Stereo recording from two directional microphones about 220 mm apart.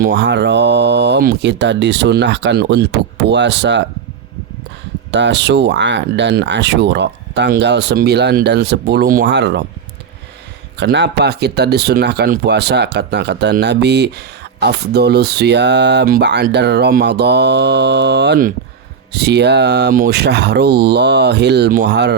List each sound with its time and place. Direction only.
0.0 s speech: 50° right (ahead or behind)
5.1 s speech: 55° right (ahead or behind)
10.8 s speech: 50° right (ahead or behind)